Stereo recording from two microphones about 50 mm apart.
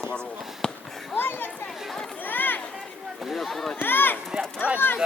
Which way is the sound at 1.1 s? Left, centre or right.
Left.